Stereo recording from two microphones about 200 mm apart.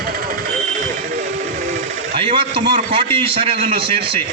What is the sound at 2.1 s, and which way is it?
A man's voice, 25° right (ahead or behind).